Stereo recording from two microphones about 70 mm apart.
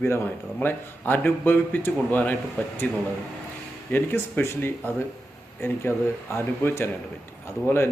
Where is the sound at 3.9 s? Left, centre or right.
Left.